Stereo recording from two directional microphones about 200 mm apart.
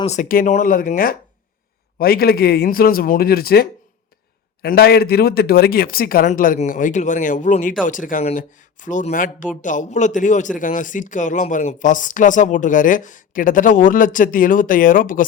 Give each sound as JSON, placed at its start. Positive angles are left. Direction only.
{"t": 0.0, "sound": "a man's voice", "side_deg": 35}